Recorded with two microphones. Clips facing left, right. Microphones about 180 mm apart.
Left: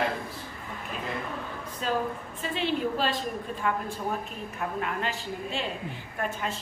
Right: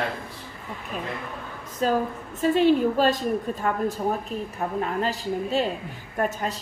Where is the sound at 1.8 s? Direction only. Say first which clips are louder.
Right 6 dB; 40° right (ahead or behind).